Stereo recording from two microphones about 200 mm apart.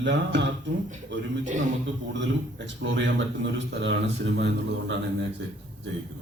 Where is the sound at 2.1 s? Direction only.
65° right (ahead or behind).